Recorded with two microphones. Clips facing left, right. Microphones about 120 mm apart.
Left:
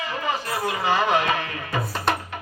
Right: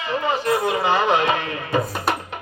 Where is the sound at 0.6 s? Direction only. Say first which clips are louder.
Even; 20° right (ahead or behind).